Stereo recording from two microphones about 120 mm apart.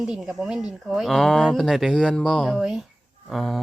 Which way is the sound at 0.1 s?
5° right (ahead or behind).